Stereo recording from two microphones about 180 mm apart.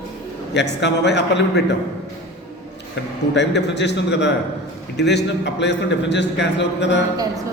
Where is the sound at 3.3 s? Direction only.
75° left (ahead or behind).